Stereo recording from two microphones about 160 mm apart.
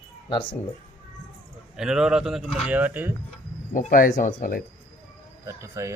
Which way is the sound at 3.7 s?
60° left (ahead or behind).